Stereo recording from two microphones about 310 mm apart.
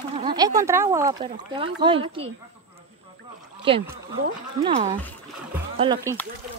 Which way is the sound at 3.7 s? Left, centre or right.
Centre.